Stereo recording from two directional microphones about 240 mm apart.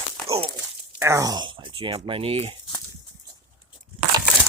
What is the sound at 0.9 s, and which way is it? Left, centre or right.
Speech, centre.